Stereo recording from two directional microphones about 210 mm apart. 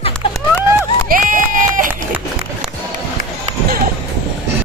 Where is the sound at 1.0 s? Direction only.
40° right (ahead or behind).